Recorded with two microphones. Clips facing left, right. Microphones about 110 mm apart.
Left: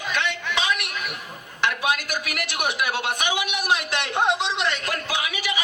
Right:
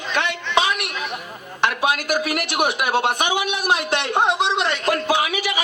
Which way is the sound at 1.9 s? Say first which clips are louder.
Right 8 dB; 45° right (ahead or behind).